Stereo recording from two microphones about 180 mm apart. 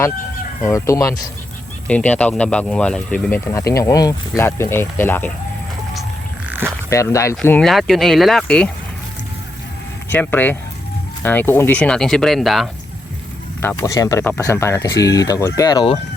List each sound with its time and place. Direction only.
0.6 s speech: 15° left (ahead or behind)
1.9 s speech: 5° left (ahead or behind)
6.5 s a sound: 10° right (ahead or behind)
6.9 s speech: 15° left (ahead or behind)
7.6 s speech: centre (ahead or behind)
10.1 s speech: 10° left (ahead or behind)
13.6 s speech: 15° left (ahead or behind)